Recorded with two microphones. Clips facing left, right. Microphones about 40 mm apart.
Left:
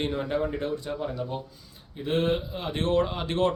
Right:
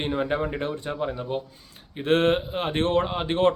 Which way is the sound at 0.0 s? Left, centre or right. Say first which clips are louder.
Right 2 dB; right.